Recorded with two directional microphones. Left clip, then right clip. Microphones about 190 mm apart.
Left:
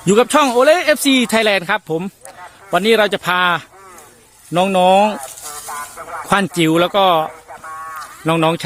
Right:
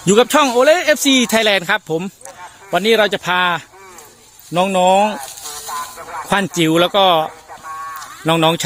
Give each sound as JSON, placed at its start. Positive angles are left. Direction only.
{"t": 0.0, "sound": "speech", "side_deg": 5}